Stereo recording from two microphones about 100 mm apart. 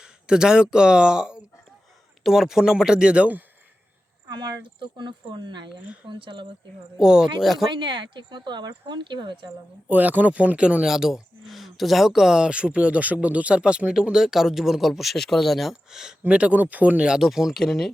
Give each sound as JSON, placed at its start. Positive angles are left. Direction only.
{"t": 0.0, "sound": "speech", "side_deg": -10}
{"t": 4.3, "sound": "speech", "side_deg": -50}
{"t": 7.0, "sound": "speech", "side_deg": -5}
{"t": 7.7, "sound": "speech", "side_deg": -55}
{"t": 9.9, "sound": "speech", "side_deg": -15}